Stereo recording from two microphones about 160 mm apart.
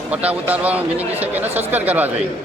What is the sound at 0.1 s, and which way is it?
A man's voice, 10° right (ahead or behind).